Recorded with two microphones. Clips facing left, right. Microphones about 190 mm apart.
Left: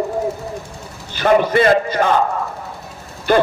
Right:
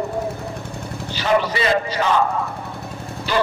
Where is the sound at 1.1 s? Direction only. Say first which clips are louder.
Left 6 dB; 50° left (ahead or behind).